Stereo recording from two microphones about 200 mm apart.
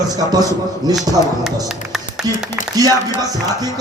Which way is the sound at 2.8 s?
20° right (ahead or behind).